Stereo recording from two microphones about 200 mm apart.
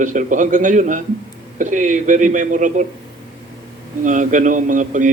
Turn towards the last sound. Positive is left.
turn(degrees=-40)  # may be behind; listen again after turning